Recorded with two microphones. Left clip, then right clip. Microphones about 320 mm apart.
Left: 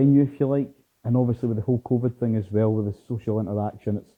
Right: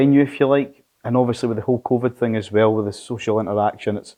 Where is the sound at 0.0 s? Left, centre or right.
Centre.